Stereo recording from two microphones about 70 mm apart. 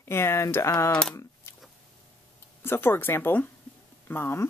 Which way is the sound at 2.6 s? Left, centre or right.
Left.